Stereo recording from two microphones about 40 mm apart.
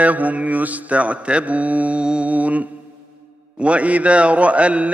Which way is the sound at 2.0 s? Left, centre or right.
Right.